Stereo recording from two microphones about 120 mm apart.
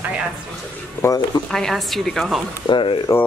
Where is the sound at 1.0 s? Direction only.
30° left (ahead or behind).